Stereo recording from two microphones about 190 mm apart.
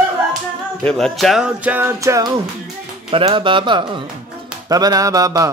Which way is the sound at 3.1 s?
25° right (ahead or behind).